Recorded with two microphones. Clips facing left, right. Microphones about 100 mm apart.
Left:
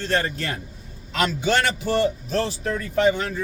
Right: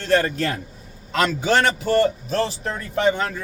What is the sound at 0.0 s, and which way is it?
Speech, 60° right (ahead or behind).